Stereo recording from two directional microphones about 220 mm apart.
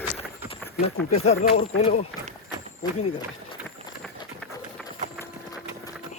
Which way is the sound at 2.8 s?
15° left (ahead or behind).